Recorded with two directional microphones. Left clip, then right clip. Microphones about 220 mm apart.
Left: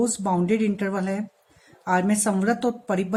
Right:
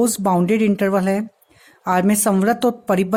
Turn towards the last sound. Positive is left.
turn(degrees=-45)  # may be behind; listen again after turning